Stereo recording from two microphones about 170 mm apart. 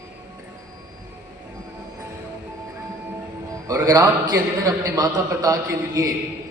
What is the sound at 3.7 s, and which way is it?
A man's voice, 20° right (ahead or behind).